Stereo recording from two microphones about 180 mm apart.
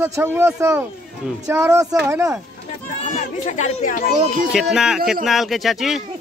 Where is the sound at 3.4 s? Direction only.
45° left (ahead or behind).